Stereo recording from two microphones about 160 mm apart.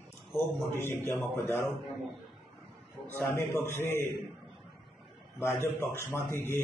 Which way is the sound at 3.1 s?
15° left (ahead or behind).